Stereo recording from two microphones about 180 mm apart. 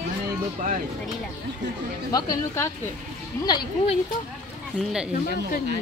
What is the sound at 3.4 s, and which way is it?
Speech, 25° left (ahead or behind).